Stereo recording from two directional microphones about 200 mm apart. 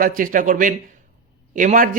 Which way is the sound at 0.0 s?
45° right (ahead or behind).